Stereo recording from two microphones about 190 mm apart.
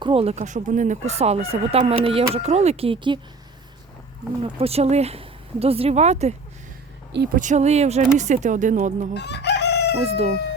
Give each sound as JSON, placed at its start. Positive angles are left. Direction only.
{"t": 0.0, "sound": "speech", "side_deg": -30}
{"t": 4.4, "sound": "speech", "side_deg": -30}
{"t": 7.3, "sound": "speech", "side_deg": -40}
{"t": 9.1, "sound": "chicken", "side_deg": 65}
{"t": 10.0, "sound": "speech", "side_deg": -35}